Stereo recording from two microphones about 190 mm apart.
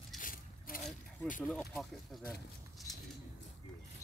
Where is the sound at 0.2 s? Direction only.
50° left (ahead or behind).